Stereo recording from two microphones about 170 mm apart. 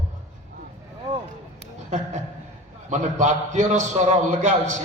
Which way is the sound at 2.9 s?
45° right (ahead or behind).